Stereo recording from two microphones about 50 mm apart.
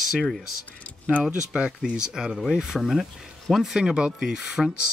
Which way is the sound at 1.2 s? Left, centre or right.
Right.